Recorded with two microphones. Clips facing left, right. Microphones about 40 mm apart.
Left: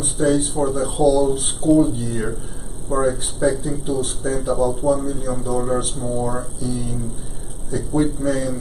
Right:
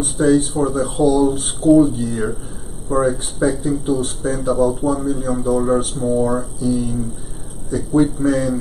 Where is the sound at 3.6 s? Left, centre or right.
Centre.